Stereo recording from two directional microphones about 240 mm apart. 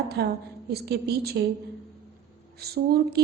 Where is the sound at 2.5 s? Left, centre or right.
Right.